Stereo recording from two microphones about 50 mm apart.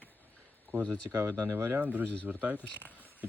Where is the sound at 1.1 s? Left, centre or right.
Right.